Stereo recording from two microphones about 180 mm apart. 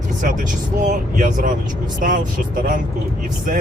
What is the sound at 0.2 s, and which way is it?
Speech, 45° right (ahead or behind).